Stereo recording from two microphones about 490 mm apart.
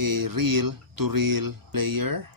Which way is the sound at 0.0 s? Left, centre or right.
Right.